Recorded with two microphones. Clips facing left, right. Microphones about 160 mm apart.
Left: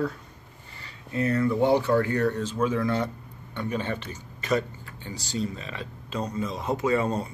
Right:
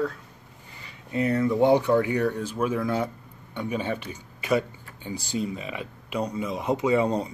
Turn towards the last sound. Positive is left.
turn(degrees=-15)  # may be behind; listen again after turning